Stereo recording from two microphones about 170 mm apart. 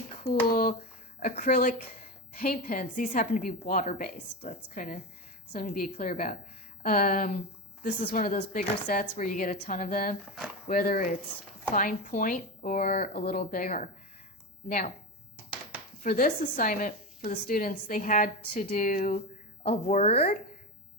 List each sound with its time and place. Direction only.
0.3 s a woman's voice: 55° left (ahead or behind)
16.0 s a woman's voice: 55° left (ahead or behind); by 20.2 s 35° left (ahead or behind)